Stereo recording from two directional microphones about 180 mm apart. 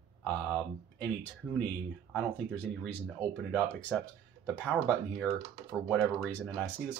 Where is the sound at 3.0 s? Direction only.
10° left (ahead or behind).